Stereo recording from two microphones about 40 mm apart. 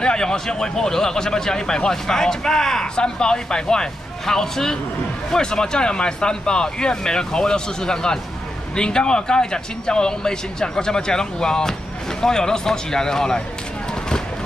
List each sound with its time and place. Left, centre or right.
0.0 s speech: centre